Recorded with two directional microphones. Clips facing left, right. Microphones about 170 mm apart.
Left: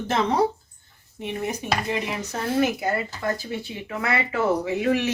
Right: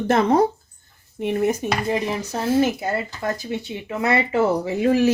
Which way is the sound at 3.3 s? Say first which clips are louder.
Right 3 dB; 20° right (ahead or behind).